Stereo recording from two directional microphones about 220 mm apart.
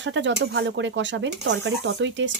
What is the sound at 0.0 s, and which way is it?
Speech, 55° right (ahead or behind).